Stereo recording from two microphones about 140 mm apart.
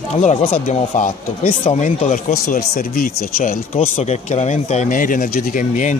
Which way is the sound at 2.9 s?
90° left.